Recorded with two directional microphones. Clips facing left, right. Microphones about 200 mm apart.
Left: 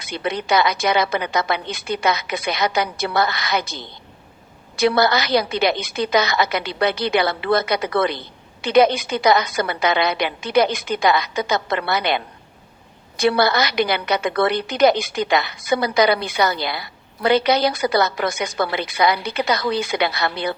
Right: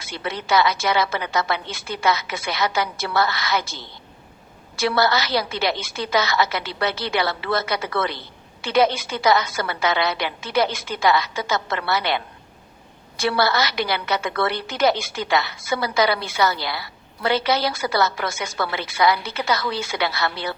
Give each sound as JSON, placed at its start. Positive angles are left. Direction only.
{"t": 0.0, "sound": "a woman's voice", "side_deg": 15}